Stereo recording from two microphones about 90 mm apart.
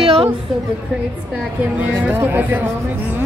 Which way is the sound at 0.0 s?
90° right.